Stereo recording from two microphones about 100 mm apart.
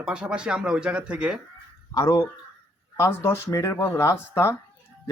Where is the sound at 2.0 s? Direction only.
25° left (ahead or behind).